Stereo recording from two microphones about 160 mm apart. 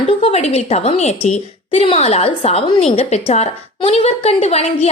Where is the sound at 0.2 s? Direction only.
40° left (ahead or behind).